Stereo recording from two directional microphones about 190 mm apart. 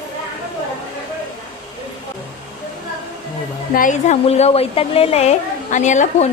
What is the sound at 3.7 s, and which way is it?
A woman's voice, 40° left (ahead or behind).